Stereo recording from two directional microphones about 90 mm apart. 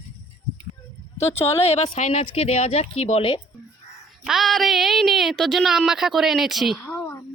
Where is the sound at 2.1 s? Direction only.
90° left.